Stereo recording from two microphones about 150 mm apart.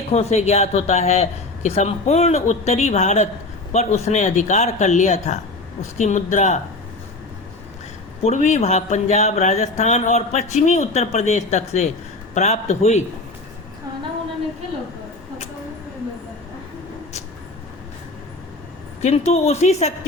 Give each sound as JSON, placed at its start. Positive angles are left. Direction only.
{"t": 0.1, "sound": "speech", "side_deg": 45}
{"t": 8.2, "sound": "speech", "side_deg": 50}
{"t": 19.0, "sound": "speech", "side_deg": 45}